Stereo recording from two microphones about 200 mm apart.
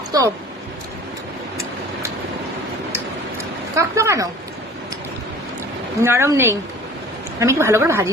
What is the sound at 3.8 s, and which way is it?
Speech, 15° right (ahead or behind).